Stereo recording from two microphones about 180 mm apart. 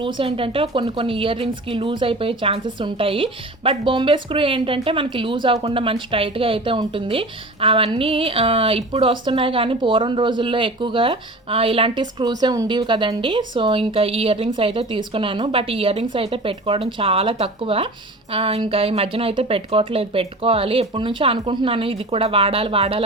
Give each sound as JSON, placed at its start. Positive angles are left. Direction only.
{"t": 0.0, "sound": "speech", "side_deg": -30}